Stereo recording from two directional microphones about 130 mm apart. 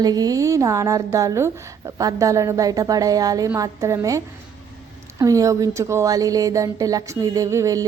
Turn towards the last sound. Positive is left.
turn(degrees=-25)  # may be behind; listen again after turning